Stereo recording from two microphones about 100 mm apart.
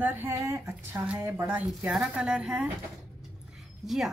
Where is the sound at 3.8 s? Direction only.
Centre (ahead or behind).